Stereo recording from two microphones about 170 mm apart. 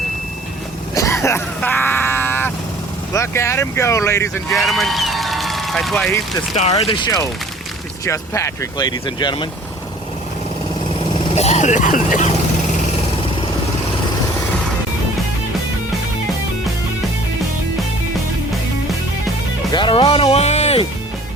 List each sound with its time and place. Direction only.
0.9 s a sound: 15° left (ahead or behind)
3.1 s speech: 15° left (ahead or behind)
4.5 s a man's voice: centre (ahead or behind)
6.5 s speech: 40° left (ahead or behind)
11.3 s speech: 40° left (ahead or behind)
19.7 s music: 30° left (ahead or behind)